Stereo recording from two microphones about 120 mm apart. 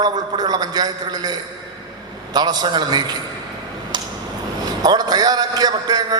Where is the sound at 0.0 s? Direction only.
35° right (ahead or behind).